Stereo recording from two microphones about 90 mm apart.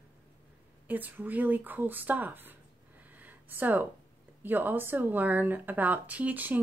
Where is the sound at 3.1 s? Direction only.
20° right (ahead or behind).